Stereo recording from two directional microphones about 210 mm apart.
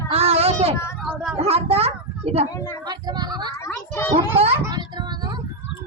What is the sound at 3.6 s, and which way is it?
Speech, 10° left (ahead or behind).